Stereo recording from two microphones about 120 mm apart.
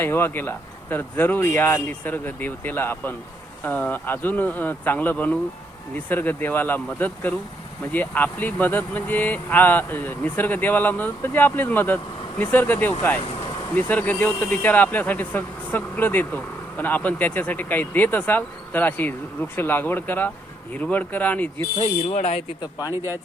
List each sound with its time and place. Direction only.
0.0 s speech: 20° left (ahead or behind)
21.8 s speech: 70° left (ahead or behind)
22.6 s speech: 30° left (ahead or behind)